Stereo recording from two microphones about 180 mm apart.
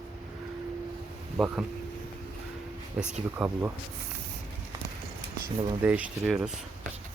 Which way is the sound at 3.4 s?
5° right (ahead or behind).